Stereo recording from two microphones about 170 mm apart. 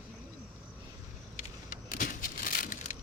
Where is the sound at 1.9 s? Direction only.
55° left (ahead or behind).